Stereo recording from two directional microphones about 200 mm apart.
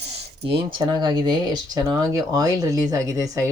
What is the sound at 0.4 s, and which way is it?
Speech, 25° right (ahead or behind).